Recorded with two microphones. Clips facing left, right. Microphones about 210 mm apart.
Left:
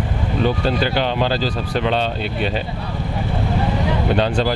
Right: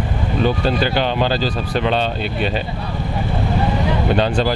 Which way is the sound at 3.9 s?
20° right (ahead or behind).